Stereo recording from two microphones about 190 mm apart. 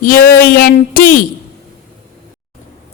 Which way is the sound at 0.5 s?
50° left (ahead or behind).